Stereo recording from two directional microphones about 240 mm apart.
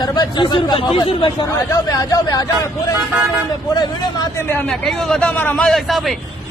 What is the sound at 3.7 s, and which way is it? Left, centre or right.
Speech, centre.